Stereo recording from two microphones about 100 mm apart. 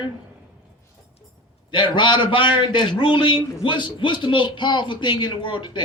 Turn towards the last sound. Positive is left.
turn(degrees=50)  # may be behind; listen again after turning